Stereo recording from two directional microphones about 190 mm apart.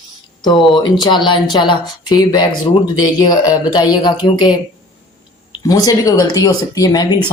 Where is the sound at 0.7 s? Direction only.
25° left (ahead or behind).